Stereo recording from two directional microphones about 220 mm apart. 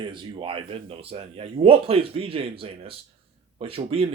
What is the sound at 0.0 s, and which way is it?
Speech, 20° right (ahead or behind).